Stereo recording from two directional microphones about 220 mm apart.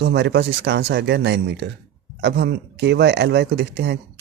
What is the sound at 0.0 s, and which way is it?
Speech, 50° right (ahead or behind).